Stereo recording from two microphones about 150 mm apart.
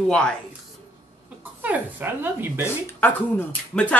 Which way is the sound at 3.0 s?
10° left (ahead or behind).